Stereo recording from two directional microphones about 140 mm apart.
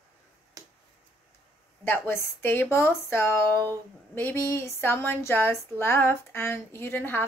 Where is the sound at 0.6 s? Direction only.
25° right (ahead or behind).